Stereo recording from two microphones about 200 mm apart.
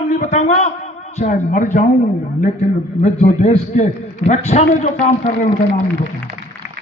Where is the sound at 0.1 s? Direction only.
35° left (ahead or behind).